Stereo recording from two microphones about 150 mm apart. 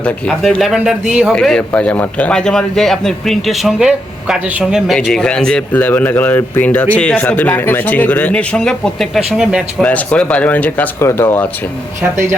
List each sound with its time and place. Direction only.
0.0 s a man's voice: 5° left (ahead or behind)
9.8 s speech: 10° left (ahead or behind)
12.1 s speech: 15° right (ahead or behind)